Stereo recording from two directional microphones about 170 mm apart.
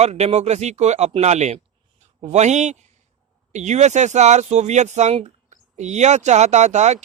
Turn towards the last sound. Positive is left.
turn(degrees=-45)  # may be behind; listen again after turning